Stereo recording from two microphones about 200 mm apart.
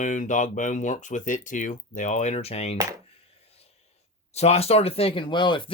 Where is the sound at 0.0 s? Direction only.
40° left (ahead or behind).